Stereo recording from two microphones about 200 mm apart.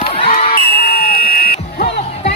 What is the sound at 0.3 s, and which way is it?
Crowd, 50° left (ahead or behind).